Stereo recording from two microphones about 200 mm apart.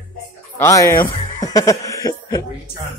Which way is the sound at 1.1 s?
20° left (ahead or behind).